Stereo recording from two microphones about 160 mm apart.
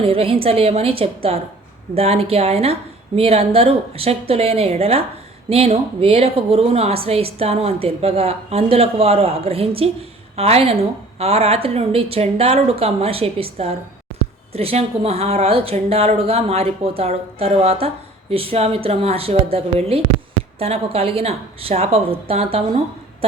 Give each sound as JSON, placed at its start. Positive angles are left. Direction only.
{"t": 0.0, "sound": "speech", "side_deg": -35}